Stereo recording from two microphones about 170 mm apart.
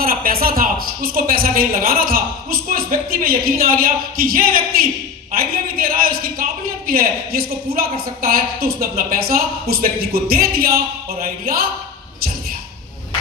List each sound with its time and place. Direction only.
0.0 s a woman's voice: 60° right (ahead or behind)